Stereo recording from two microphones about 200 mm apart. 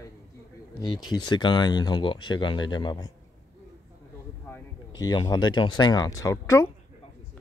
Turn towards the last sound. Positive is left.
turn(degrees=15)  # may be behind; listen again after turning